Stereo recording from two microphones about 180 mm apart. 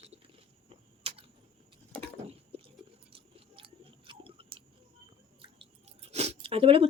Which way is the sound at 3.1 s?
30° right (ahead or behind).